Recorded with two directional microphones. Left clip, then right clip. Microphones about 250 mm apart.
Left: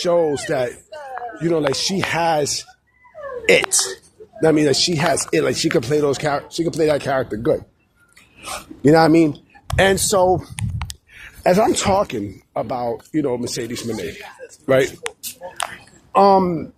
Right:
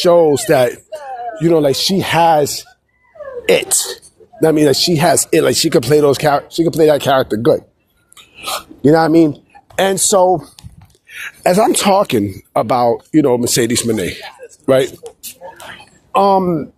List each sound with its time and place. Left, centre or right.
0.0 s speech: right
1.4 s speech: right; by 10.5 s centre
11.1 s speech: right
14.8 s speech: centre
16.1 s speech: right